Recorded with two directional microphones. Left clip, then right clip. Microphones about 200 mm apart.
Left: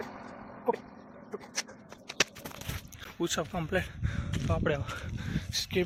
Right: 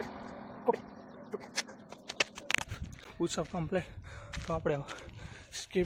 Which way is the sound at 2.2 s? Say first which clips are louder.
Left 4 dB; 20° left (ahead or behind).